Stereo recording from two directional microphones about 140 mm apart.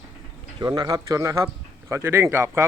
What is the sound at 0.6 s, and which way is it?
A man's voice, 30° right (ahead or behind).